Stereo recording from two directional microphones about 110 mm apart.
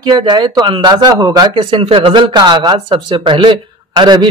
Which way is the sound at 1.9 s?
55° right (ahead or behind).